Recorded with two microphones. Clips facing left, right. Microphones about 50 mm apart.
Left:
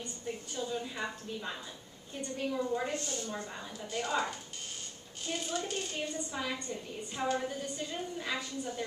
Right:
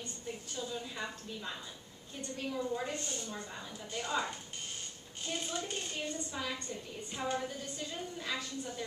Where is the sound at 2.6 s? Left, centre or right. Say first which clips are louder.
Left 2 dB; centre.